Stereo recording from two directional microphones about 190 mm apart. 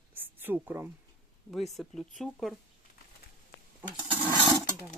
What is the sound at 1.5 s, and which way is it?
Speech, centre (ahead or behind).